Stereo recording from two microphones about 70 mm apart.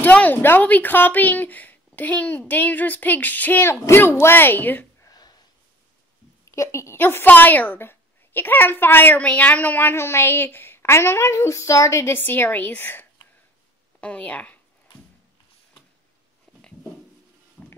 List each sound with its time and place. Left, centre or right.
0.0 s a woman's voice: left
3.6 s a child's voice: left
5.0 s a sound: left
6.4 s a woman's voice: left
7.0 s a child's voice: left
14.0 s a woman's voice: centre
16.5 s dog: centre
17.6 s music: centre